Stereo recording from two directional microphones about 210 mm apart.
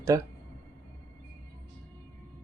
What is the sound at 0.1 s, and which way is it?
Speech, 15° right (ahead or behind).